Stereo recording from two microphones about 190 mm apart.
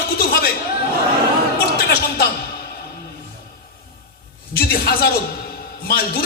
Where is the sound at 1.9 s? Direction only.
55° left (ahead or behind).